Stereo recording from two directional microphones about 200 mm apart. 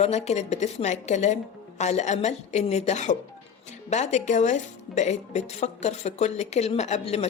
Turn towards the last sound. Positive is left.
turn(degrees=35)  # may be behind; listen again after turning